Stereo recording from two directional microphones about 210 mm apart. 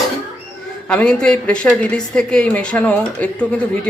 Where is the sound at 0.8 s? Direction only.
5° left (ahead or behind).